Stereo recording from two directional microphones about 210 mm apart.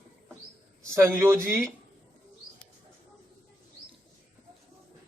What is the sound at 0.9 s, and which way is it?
Speech, 10° right (ahead or behind).